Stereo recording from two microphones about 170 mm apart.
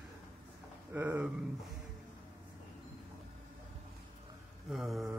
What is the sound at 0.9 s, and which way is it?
Speech, 10° right (ahead or behind).